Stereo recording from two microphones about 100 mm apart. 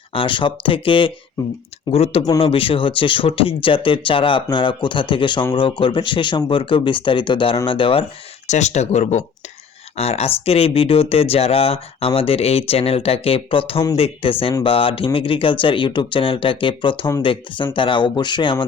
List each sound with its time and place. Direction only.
0.1 s speech: 60° left (ahead or behind)
1.9 s speech: 90° left
2.4 s speech: 65° left (ahead or behind)
9.1 s speech: 90° left; by 13.8 s 65° left (ahead or behind)
13.9 s speech: 75° left (ahead or behind); by 18.5 s 50° left (ahead or behind)